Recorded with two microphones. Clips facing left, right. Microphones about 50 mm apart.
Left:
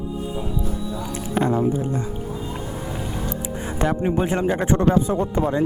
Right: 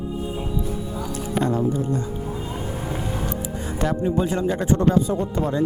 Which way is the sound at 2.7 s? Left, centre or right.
Right.